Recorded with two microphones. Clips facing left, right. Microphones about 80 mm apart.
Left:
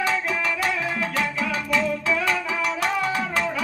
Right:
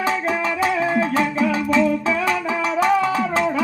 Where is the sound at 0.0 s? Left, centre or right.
Right.